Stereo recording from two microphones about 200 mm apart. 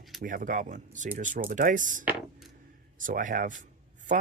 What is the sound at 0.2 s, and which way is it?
Speech, 45° right (ahead or behind).